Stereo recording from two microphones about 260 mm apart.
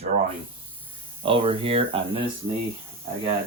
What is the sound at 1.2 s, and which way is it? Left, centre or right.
Speech, right.